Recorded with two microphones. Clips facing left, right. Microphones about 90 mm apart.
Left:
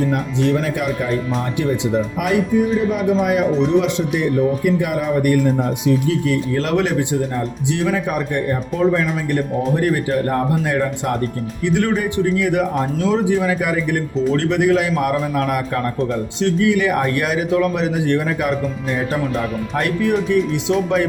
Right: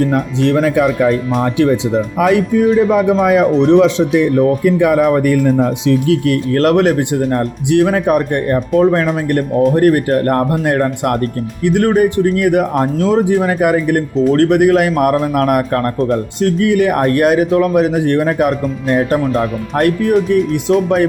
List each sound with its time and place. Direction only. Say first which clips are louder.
0.5 s a man's voice: right 7 dB; 90° right
2.3 s a man's voice: right 4 dB; 90° right
5.6 s speech: right 5 dB; 75° right (ahead or behind)
11.6 s speech: right 7 dB; 50° right (ahead or behind)